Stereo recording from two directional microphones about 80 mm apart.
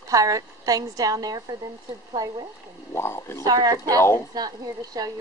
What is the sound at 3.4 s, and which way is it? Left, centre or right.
Speech, right.